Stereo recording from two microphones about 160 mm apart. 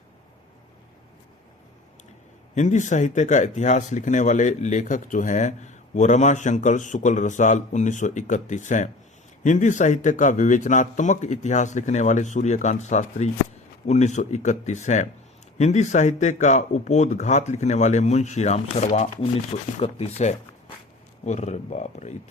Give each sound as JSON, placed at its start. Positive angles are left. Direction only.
{"t": 2.6, "sound": "speech", "side_deg": 50}